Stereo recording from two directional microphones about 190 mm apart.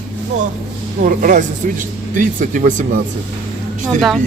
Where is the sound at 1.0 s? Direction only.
45° right (ahead or behind).